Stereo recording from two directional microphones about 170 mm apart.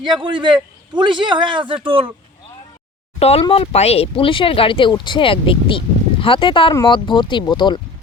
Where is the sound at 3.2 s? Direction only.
35° left (ahead or behind).